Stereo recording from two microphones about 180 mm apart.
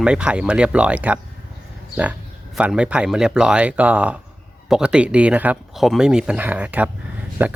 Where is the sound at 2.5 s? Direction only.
5° right (ahead or behind).